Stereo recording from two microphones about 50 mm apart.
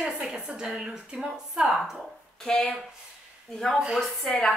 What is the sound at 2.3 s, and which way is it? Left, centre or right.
A woman's voice, centre.